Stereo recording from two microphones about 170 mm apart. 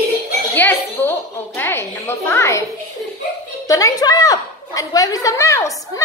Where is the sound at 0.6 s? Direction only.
10° left (ahead or behind).